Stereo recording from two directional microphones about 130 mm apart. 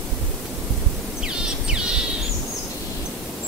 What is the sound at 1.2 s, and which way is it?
Music, 5° right (ahead or behind).